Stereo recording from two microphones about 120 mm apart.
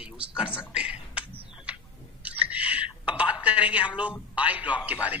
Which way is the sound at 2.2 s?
10° right (ahead or behind).